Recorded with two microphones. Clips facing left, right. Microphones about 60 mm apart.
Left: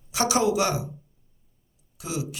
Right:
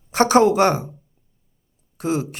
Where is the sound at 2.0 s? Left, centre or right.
Right.